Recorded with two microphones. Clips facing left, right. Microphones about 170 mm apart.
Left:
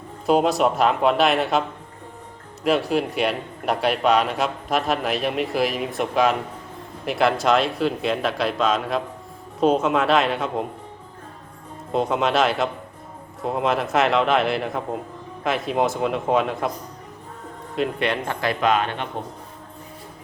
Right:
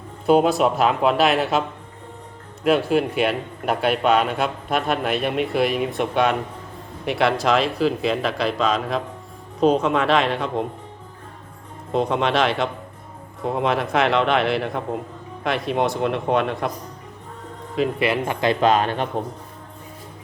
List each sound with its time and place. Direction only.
0.3 s a man's voice: centre (ahead or behind)
2.6 s a man's voice: centre (ahead or behind)
11.9 s a man's voice: centre (ahead or behind)
17.7 s speech: 5° right (ahead or behind)
18.6 s speech: 35° right (ahead or behind)